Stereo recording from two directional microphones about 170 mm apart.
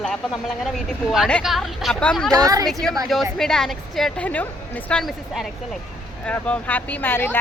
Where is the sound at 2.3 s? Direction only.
20° right (ahead or behind).